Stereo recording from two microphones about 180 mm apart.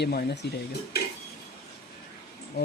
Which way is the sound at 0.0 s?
65° left (ahead or behind).